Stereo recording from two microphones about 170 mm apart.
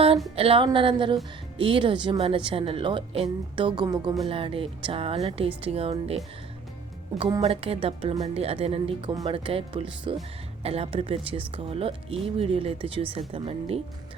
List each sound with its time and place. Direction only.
0.3 s a woman's voice: 30° right (ahead or behind)
7.2 s a woman's voice: 25° right (ahead or behind)
7.4 s speech: 35° right (ahead or behind)